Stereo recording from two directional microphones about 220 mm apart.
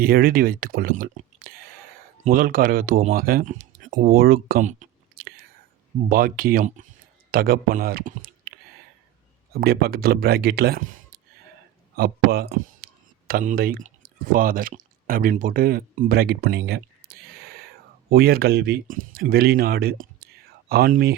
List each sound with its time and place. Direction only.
0.0 s speech: 40° right (ahead or behind)